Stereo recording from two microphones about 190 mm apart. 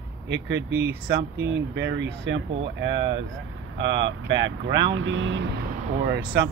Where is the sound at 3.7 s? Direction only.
75° right (ahead or behind).